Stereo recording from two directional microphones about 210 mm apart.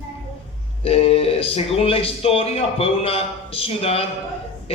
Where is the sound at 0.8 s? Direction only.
30° left (ahead or behind).